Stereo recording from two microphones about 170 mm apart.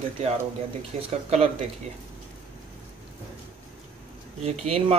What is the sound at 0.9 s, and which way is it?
Speech, 35° right (ahead or behind).